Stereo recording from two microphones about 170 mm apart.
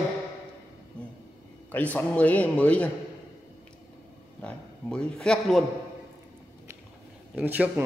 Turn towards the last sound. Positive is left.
turn(degrees=-10)  # may be behind; listen again after turning